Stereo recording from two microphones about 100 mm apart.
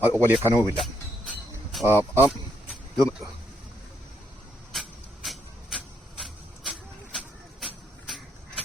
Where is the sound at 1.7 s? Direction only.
Centre (ahead or behind).